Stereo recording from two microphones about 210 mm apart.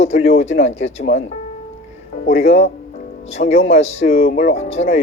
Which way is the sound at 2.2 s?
30° left (ahead or behind).